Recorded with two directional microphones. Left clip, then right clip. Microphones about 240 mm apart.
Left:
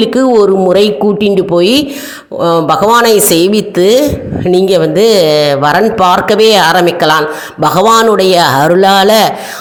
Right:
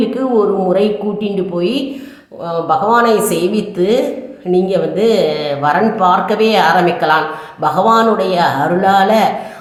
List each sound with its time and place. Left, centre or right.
0.0 s speech: left